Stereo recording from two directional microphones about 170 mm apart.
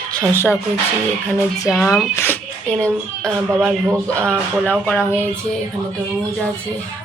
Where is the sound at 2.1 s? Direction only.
10° left (ahead or behind).